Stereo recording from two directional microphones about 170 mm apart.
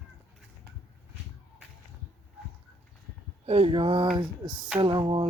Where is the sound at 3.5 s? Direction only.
35° right (ahead or behind).